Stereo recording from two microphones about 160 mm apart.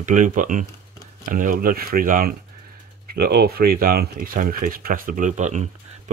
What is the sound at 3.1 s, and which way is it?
Speech, 75° right (ahead or behind).